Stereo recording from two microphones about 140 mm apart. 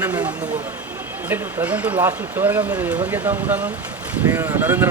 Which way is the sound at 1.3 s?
10° right (ahead or behind).